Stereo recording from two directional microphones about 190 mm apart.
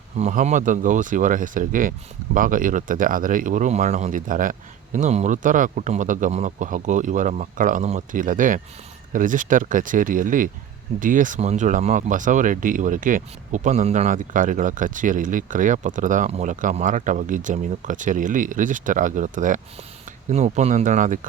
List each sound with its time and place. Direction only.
0.2 s speech: 35° right (ahead or behind)